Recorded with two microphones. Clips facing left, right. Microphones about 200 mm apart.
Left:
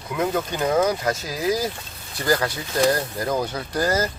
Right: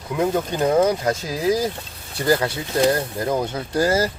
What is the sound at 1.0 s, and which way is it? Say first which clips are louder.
Speech: right 2 dB; 30° right (ahead or behind).